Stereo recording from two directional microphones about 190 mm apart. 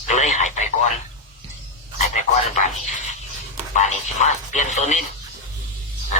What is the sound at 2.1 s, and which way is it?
Speech, 40° left (ahead or behind).